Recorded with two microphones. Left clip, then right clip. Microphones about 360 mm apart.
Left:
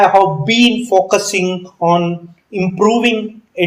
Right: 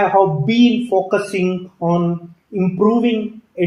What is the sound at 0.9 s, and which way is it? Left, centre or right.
A man's voice, left.